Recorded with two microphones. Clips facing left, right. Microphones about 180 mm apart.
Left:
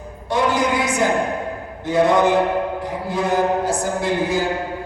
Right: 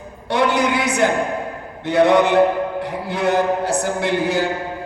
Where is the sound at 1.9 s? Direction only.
65° right (ahead or behind).